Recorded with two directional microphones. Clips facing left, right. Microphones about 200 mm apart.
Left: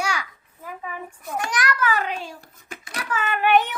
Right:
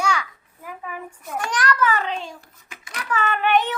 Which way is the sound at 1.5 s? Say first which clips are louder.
Right 3 dB; 10° left (ahead or behind).